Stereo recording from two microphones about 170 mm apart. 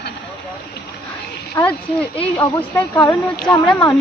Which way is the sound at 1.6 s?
15° left (ahead or behind).